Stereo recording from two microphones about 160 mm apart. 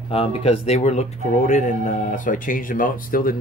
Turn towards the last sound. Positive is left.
turn(degrees=60)  # may be behind; listen again after turning